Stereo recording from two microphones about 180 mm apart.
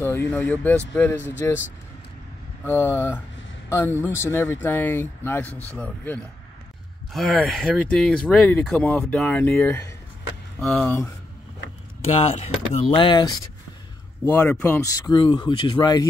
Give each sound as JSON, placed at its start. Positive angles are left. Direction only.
{"t": 0.0, "sound": "speech", "side_deg": 15}
{"t": 2.6, "sound": "speech", "side_deg": 15}
{"t": 12.0, "sound": "speech", "side_deg": 30}
{"t": 14.2, "sound": "speech", "side_deg": 15}